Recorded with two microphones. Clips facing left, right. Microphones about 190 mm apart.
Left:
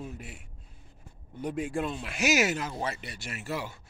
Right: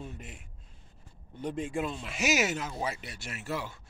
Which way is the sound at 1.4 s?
5° left (ahead or behind).